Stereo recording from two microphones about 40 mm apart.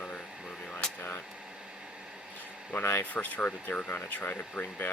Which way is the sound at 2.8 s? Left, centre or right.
Left.